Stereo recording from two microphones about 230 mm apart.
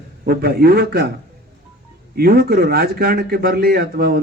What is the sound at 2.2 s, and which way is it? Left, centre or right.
A man's voice, right.